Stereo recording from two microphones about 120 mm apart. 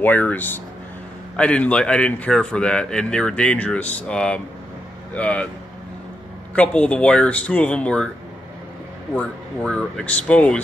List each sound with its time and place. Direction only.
0.0 s a man's voice: 15° left (ahead or behind)
6.5 s a man's voice: 10° left (ahead or behind)
9.1 s a man's voice: 10° left (ahead or behind)